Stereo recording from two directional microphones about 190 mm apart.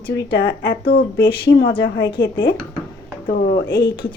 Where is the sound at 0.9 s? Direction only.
25° left (ahead or behind).